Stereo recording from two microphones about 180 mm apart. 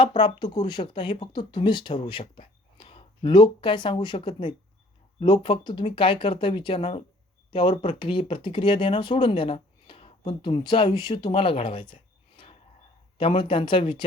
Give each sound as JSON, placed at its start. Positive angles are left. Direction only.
{"t": 0.2, "sound": "speech", "side_deg": 25}
{"t": 13.1, "sound": "speech", "side_deg": 30}